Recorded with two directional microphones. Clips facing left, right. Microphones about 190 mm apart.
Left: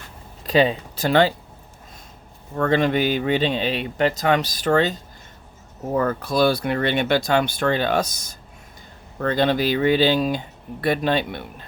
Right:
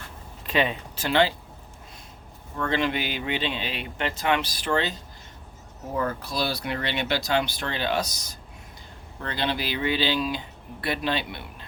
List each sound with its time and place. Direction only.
0.4 s speech: 35° left (ahead or behind)
2.6 s speech: 45° left (ahead or behind)
5.9 s speech: 55° left (ahead or behind)